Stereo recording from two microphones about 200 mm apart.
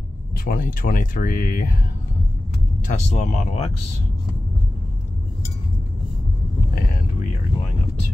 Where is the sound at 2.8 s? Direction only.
35° left (ahead or behind).